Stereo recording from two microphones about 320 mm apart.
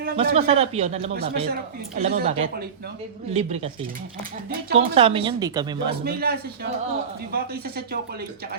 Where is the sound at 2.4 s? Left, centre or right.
Right.